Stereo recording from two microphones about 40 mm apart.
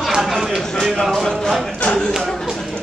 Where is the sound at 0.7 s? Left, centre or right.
Centre.